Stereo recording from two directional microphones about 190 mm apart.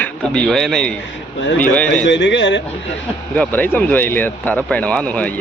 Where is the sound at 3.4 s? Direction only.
10° left (ahead or behind).